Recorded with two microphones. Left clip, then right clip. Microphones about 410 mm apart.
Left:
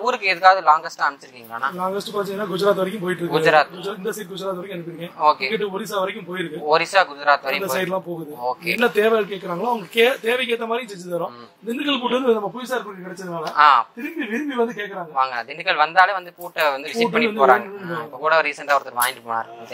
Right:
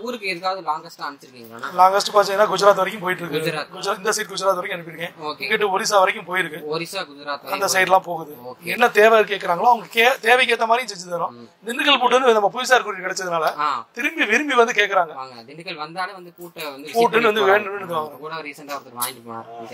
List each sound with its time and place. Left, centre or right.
0.0 s speech: left
1.8 s speech: right
3.3 s a man's voice: left
3.8 s speech: right
5.2 s a man's voice: left
5.5 s speech: right
6.7 s speech: left
7.7 s speech: right
13.4 s speech: left
14.1 s speech: right
15.3 s speech: left
18.2 s speech: left